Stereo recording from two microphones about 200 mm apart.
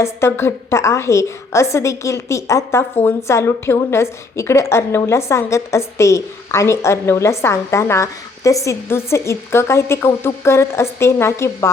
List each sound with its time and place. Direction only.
0.0 s a woman's voice: 15° left (ahead or behind)